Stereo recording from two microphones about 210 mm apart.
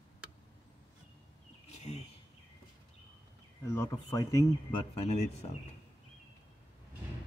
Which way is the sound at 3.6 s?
15° left (ahead or behind).